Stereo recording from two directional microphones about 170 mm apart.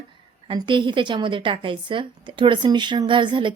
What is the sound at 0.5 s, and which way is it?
A woman's voice, 30° right (ahead or behind).